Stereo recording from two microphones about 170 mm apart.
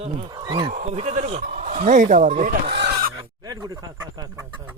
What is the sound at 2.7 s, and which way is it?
Chicken, 75° right (ahead or behind).